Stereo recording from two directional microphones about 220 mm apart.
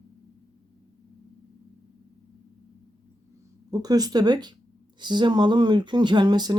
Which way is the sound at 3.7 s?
15° right (ahead or behind).